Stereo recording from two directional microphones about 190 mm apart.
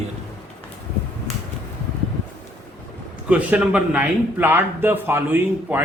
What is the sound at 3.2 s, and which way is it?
A man's voice, 5° right (ahead or behind).